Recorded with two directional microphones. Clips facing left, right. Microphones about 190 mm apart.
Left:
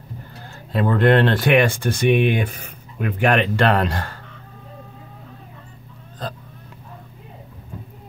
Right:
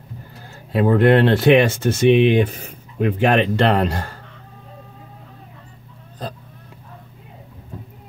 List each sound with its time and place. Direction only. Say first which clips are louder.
0.7 s speech: right 2 dB; 20° right (ahead or behind)